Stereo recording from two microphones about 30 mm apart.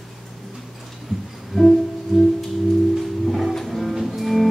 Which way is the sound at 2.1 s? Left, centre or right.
Centre.